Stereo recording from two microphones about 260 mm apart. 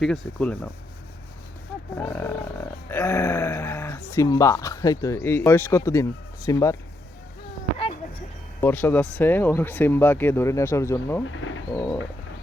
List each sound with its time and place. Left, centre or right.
0.0 s speech: centre
2.0 s speech: centre
8.6 s speech: centre
11.3 s bird: left